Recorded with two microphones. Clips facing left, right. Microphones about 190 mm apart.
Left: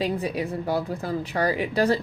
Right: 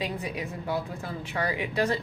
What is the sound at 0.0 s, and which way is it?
Speech, 35° left (ahead or behind).